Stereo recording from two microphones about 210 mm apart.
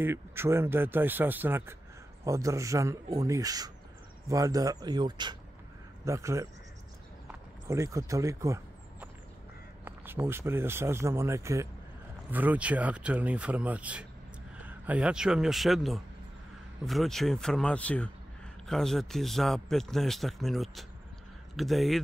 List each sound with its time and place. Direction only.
0.0 s speech: 10° right (ahead or behind)
9.8 s speech: 10° right (ahead or behind)